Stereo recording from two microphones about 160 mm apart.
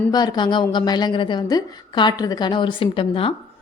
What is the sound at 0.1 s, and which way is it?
A woman's voice, 25° left (ahead or behind).